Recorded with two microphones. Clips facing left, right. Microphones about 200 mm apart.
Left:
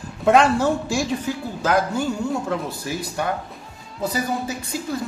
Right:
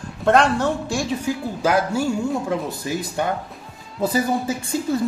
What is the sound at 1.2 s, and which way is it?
Speech, 10° right (ahead or behind).